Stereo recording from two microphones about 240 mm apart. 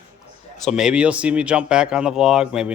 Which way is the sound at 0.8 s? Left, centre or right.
Centre.